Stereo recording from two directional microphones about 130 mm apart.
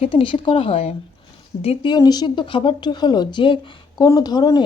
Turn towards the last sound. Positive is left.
turn(degrees=30)  # may be behind; listen again after turning